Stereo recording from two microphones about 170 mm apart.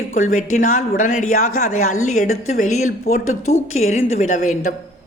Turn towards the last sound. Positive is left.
turn(degrees=45)  # may be behind; listen again after turning